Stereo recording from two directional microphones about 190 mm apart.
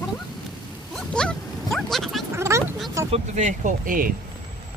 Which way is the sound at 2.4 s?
15° right (ahead or behind).